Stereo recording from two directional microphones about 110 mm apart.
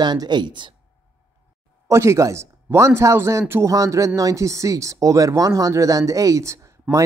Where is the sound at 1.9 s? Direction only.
25° right (ahead or behind).